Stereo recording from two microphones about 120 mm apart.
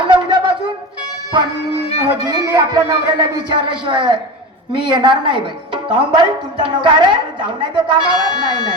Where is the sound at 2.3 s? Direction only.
35° right (ahead or behind).